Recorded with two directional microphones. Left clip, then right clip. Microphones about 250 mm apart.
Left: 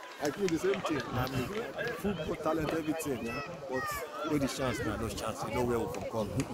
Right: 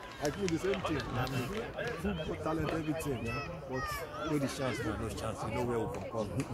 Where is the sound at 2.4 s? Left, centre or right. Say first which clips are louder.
Left 4 dB; left.